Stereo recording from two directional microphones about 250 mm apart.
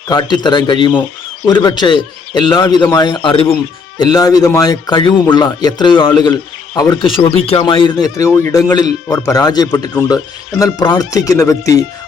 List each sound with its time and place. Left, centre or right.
0.1 s speech: centre